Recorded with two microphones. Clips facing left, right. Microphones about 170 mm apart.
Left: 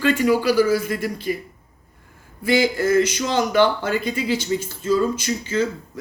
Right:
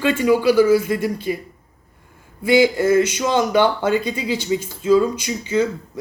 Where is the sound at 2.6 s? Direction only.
20° right (ahead or behind).